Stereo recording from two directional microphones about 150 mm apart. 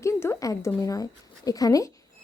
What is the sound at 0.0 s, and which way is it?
Speech, 20° left (ahead or behind).